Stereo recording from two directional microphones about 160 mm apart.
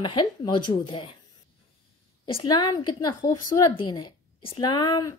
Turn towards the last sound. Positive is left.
turn(degrees=25)  # may be behind; listen again after turning